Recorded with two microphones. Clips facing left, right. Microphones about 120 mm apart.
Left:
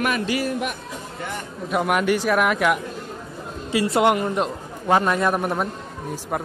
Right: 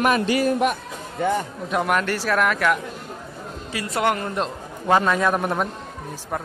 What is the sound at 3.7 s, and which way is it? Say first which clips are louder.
Speech: left 5 dB; 25° left (ahead or behind).